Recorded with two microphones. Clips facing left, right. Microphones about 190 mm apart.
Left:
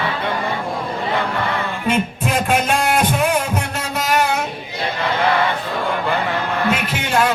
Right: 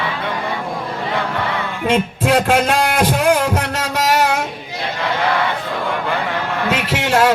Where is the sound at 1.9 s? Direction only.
90° right.